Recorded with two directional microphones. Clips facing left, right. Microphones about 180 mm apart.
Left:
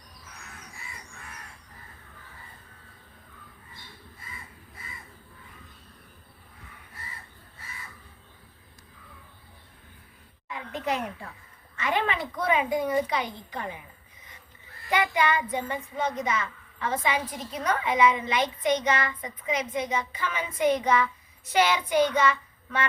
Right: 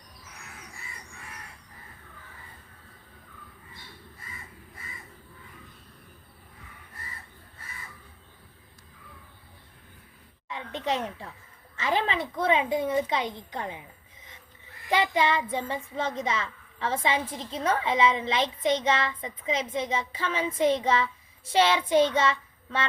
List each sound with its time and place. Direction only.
10.5 s speech: 25° right (ahead or behind)
14.8 s speech: 25° right (ahead or behind)